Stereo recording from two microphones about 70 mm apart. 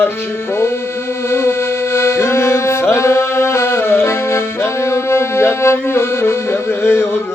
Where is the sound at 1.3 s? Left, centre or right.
Left.